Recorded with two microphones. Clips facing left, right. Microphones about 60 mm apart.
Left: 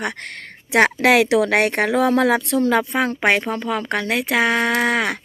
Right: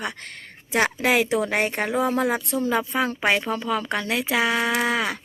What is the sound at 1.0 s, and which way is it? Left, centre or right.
Speech, left.